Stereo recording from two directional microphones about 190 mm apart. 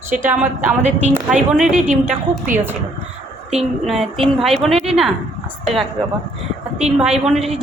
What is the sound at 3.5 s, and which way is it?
A woman's voice, centre (ahead or behind).